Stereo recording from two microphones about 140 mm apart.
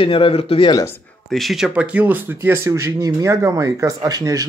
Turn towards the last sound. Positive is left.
turn(degrees=-25)  # may be behind; listen again after turning